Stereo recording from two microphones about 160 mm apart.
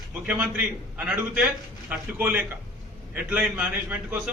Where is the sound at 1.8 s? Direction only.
10° right (ahead or behind).